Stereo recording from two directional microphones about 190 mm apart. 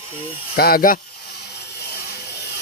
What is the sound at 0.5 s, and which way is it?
Speech, 50° left (ahead or behind).